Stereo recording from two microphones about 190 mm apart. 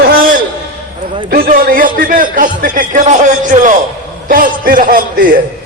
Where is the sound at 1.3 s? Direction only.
50° right (ahead or behind).